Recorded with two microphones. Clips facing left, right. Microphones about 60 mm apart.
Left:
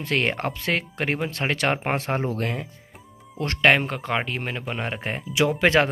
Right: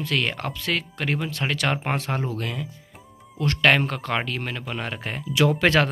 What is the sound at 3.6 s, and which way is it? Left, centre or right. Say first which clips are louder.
Speech: left 1 dB; centre.